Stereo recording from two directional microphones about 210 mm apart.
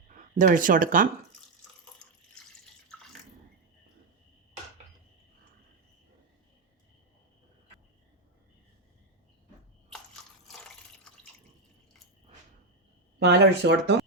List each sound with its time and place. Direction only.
0.1 s speech: 40° right (ahead or behind)
9.9 s drip: centre (ahead or behind)
13.1 s speech: 50° right (ahead or behind)